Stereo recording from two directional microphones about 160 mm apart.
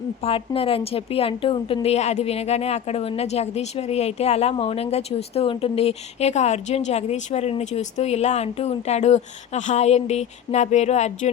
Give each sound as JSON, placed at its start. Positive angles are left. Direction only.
{"t": 0.2, "sound": "a woman's voice", "side_deg": 35}